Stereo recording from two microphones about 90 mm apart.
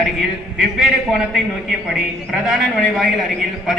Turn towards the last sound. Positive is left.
turn(degrees=-5)  # may be behind; listen again after turning